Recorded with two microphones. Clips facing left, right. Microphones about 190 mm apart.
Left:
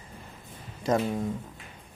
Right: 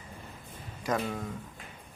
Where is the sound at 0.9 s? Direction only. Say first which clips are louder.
Left 5 dB; 25° left (ahead or behind).